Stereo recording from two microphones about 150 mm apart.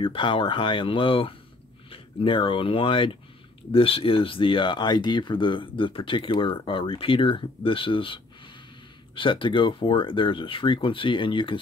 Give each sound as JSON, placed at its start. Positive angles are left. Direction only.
{"t": 0.0, "sound": "speech", "side_deg": 35}